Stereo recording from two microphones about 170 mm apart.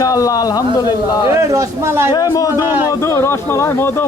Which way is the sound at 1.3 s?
20° right (ahead or behind).